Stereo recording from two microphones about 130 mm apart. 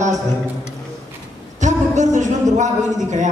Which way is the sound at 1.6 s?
70° right (ahead or behind).